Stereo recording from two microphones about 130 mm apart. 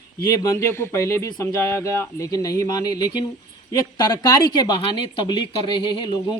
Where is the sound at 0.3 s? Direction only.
25° left (ahead or behind).